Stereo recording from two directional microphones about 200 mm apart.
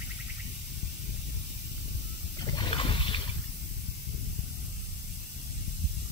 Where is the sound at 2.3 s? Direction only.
20° left (ahead or behind).